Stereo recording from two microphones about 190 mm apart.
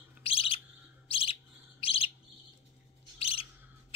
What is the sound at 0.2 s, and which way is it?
Bird, 30° left (ahead or behind).